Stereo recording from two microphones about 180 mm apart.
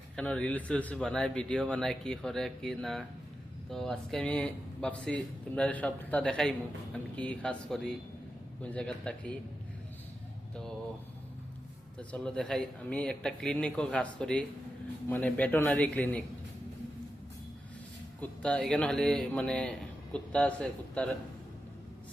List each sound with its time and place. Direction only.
0.2 s speech: 5° left (ahead or behind)
11.9 s a man's voice: 5° left (ahead or behind)
18.2 s a man's voice: 5° left (ahead or behind)